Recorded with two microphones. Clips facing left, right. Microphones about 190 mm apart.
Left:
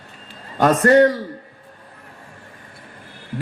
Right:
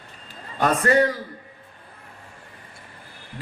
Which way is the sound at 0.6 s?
40° left (ahead or behind).